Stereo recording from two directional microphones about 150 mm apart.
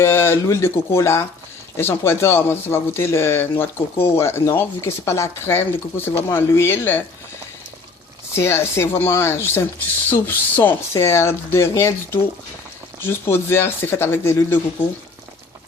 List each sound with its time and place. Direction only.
0.0 s speech: 15° left (ahead or behind)
8.4 s speech: 15° left (ahead or behind)